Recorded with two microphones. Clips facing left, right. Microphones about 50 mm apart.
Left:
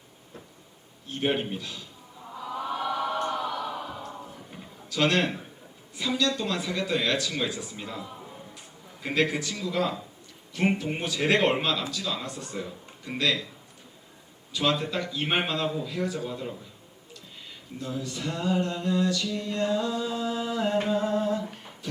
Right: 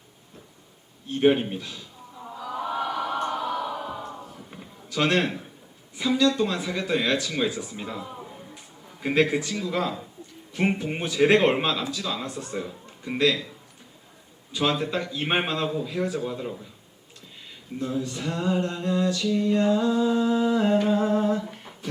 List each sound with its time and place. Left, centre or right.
1.3 s a man's voice: centre
1.5 s speech: right
2.6 s choir: centre
4.9 s a man's voice: right
7.8 s a sound: centre
9.0 s a man's voice: right
14.5 s a man's voice: right
16.2 s a man's voice: centre
17.7 s speech: right
19.2 s a sound: centre
21.0 s humming: right